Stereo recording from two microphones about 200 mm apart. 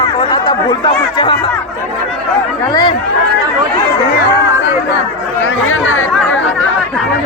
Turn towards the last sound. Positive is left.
turn(degrees=85)